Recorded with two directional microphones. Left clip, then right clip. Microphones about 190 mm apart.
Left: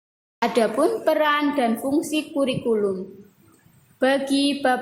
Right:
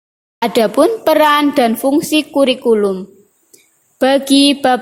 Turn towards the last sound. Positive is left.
turn(degrees=-40)  # may be behind; listen again after turning